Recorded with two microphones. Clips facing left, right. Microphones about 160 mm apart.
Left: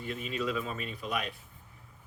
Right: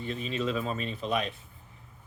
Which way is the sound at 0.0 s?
25° right (ahead or behind).